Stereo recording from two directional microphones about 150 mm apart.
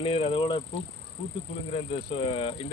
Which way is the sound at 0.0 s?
35° left (ahead or behind).